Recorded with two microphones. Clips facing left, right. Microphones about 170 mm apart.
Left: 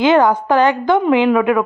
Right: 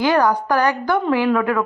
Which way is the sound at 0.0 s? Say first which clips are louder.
Left 4 dB; 25° left (ahead or behind).